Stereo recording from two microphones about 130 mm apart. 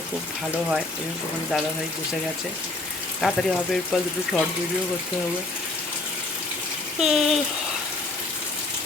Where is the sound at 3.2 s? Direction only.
5° left (ahead or behind).